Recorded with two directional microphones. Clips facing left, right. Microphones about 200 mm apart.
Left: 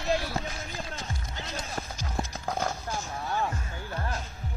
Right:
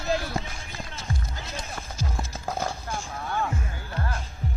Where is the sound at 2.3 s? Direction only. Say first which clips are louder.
Right 1 dB; 10° right (ahead or behind).